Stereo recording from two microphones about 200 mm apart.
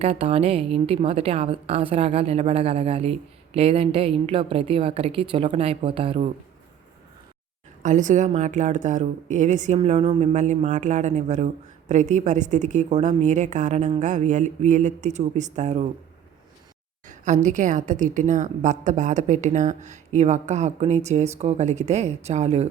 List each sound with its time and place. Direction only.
0.0 s a woman's voice: 30° right (ahead or behind)
7.8 s speech: 40° right (ahead or behind)
17.1 s speech: 35° right (ahead or behind)